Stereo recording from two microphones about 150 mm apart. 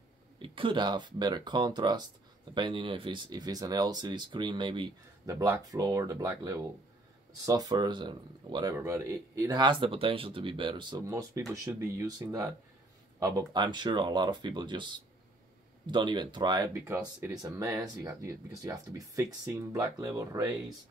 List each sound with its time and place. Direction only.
0.4 s speech: 35° right (ahead or behind)
8.7 s speech: 20° right (ahead or behind)